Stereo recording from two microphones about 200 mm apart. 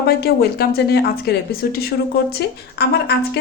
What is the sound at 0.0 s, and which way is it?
A woman's voice, 50° left (ahead or behind).